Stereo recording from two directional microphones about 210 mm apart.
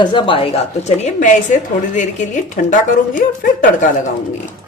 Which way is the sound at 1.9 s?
35° left (ahead or behind).